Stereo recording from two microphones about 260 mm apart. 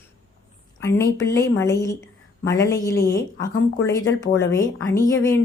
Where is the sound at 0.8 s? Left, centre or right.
Centre.